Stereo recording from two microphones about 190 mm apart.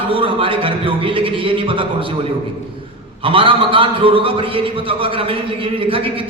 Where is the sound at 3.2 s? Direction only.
25° right (ahead or behind).